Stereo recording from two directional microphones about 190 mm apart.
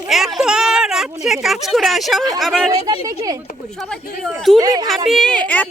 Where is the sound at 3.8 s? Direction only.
5° left (ahead or behind).